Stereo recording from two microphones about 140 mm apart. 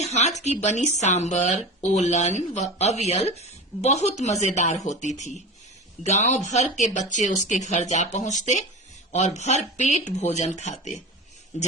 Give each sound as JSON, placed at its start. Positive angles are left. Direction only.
{"t": 0.0, "sound": "speech", "side_deg": 50}